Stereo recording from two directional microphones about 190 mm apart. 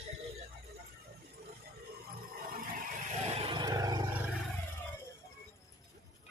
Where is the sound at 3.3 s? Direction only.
25° right (ahead or behind).